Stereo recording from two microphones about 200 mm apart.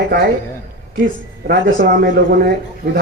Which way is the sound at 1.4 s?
55° right (ahead or behind).